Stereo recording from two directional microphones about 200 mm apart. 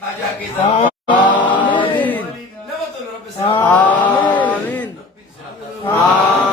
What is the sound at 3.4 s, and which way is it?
Mantra, 25° left (ahead or behind).